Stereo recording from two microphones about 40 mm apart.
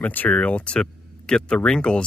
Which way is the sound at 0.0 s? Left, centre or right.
Left.